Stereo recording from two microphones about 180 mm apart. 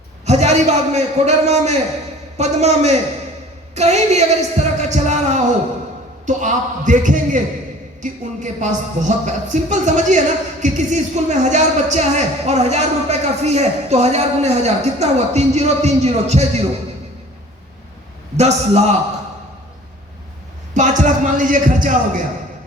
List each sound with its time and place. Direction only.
0.3 s a man's voice: 35° right (ahead or behind)
3.8 s a sound: 35° right (ahead or behind)
6.2 s a man's voice: 45° right (ahead or behind)
18.3 s speech: 35° right (ahead or behind)
20.7 s speech: 45° right (ahead or behind)